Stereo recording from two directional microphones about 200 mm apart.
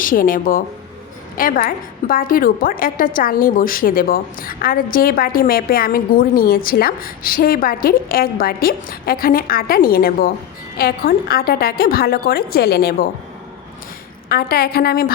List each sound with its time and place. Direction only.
0.0 s a woman's voice: 45° left (ahead or behind)
14.3 s a woman's voice: 50° left (ahead or behind)